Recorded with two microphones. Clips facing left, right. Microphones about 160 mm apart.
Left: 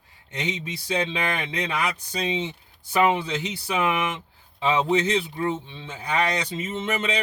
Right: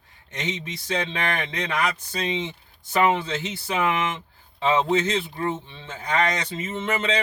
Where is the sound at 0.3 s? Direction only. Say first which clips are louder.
Left 1 dB; 15° left (ahead or behind).